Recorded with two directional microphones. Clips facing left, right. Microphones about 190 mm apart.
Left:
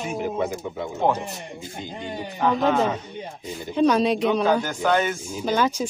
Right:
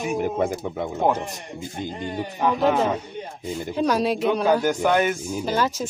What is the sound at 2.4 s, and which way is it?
Speech, 10° right (ahead or behind).